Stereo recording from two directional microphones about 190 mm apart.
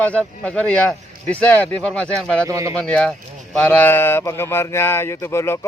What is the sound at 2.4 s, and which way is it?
Speech, 15° right (ahead or behind).